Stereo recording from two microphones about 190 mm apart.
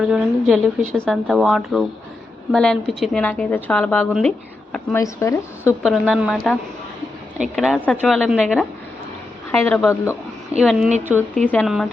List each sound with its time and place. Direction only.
0.0 s a woman's voice: centre (ahead or behind)
4.9 s a woman's voice: 15° left (ahead or behind)
5.8 s a woman's voice: centre (ahead or behind)